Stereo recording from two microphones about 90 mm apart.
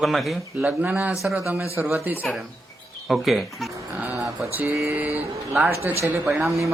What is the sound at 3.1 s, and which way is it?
Speech, centre (ahead or behind).